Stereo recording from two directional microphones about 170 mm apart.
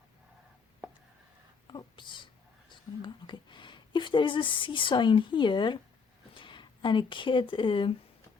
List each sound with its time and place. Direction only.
1.6 s speech: 25° left (ahead or behind)